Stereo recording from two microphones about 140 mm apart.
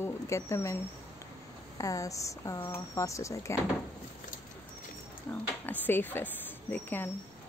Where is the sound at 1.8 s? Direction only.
25° left (ahead or behind).